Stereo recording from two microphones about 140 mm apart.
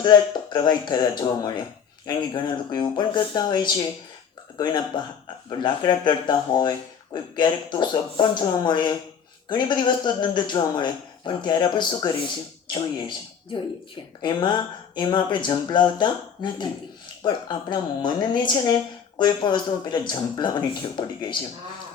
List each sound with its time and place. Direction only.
0.0 s speech: 30° left (ahead or behind)